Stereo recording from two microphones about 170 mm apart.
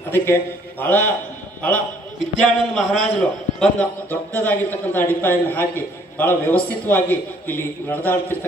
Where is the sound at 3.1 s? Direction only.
5° left (ahead or behind).